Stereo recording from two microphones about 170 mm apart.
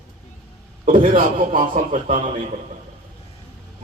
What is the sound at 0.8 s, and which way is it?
A man's voice, 50° right (ahead or behind).